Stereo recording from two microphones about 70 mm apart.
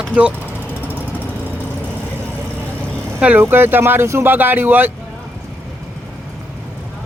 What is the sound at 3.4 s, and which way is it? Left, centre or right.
Speech, right.